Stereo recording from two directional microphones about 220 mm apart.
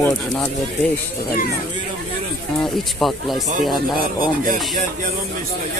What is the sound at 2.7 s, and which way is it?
Speech, centre (ahead or behind).